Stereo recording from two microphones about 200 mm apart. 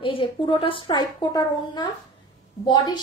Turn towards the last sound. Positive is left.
turn(degrees=20)  # may be behind; listen again after turning